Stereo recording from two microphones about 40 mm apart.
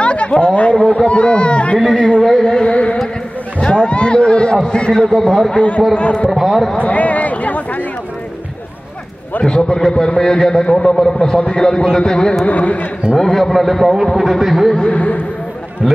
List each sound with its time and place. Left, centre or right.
0.0 s a sound: left
0.7 s a man's voice: left
2.4 s a sound: left
4.6 s a man's voice: left
5.1 s a man's voice: centre
5.6 s a man's voice: left
6.3 s a man's voice: centre
6.8 s a sound: left
9.4 s a man's voice: left
12.4 s a man's voice: left
13.2 s a man's voice: centre
14.8 s a man's voice: left